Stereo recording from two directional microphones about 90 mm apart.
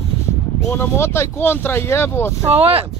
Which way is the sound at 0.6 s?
30° left (ahead or behind).